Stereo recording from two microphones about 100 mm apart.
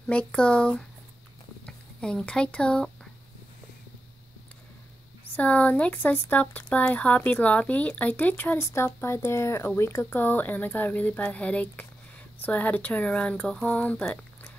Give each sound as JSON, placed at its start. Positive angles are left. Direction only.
{"t": 0.0, "sound": "speech", "side_deg": 10}
{"t": 5.2, "sound": "speech", "side_deg": 15}